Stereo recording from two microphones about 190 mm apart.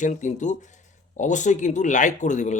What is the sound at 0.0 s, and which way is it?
Speech, 40° left (ahead or behind).